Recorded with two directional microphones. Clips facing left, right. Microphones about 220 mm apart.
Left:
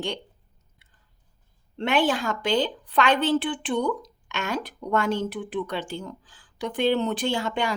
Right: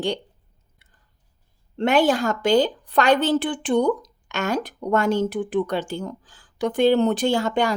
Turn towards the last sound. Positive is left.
turn(degrees=-40)  # may be behind; listen again after turning